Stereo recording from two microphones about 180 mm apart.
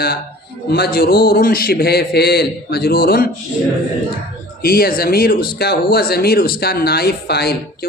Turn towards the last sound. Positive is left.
turn(degrees=60)  # may be behind; listen again after turning